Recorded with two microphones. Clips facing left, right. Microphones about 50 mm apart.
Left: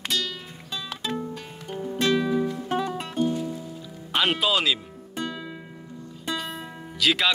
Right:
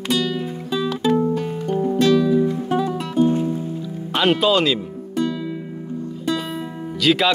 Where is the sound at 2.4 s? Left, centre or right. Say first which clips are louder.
Right 6 dB; right.